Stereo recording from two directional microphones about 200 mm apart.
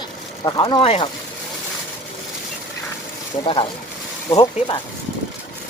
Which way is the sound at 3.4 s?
25° left (ahead or behind).